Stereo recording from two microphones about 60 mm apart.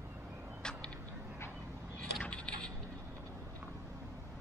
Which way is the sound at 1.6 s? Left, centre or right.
Right.